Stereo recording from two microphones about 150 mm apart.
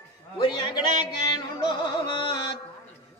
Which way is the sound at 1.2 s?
30° left (ahead or behind).